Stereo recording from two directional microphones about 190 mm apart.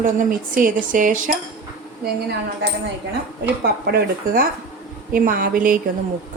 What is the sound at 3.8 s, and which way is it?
A woman's voice, 55° right (ahead or behind).